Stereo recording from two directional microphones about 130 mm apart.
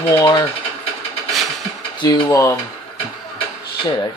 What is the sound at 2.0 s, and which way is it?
Speech, 35° left (ahead or behind).